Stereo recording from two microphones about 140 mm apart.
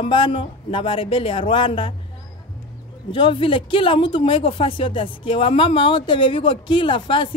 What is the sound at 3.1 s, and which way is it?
Speech, 35° left (ahead or behind).